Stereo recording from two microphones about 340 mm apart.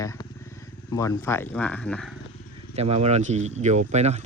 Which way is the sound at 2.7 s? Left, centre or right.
Centre.